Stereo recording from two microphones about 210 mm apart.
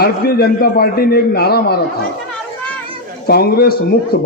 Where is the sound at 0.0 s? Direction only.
45° left (ahead or behind).